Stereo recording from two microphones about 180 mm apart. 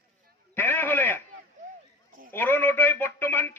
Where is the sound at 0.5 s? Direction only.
10° left (ahead or behind).